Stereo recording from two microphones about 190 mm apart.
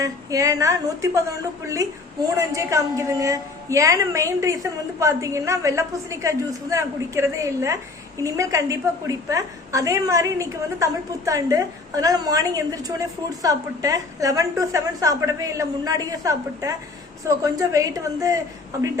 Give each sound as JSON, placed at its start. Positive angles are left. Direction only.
{"t": 0.0, "sound": "a woman's voice", "side_deg": -15}